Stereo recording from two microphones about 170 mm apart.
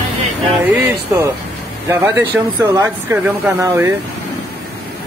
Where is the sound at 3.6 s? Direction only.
15° right (ahead or behind).